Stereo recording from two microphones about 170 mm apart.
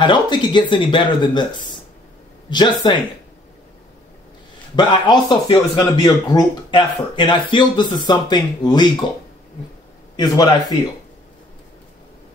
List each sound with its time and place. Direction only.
0.0 s speech: 25° left (ahead or behind)
4.7 s speech: 25° left (ahead or behind)
10.1 s speech: 25° left (ahead or behind)